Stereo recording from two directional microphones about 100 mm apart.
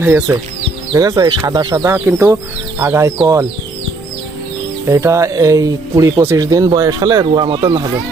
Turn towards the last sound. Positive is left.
turn(degrees=-40)  # may be behind; listen again after turning